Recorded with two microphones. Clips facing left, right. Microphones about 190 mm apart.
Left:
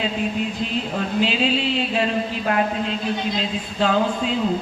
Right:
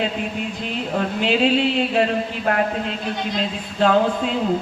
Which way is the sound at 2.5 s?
50° right (ahead or behind).